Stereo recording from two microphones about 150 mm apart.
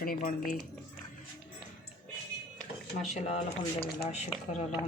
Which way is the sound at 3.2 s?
50° left (ahead or behind).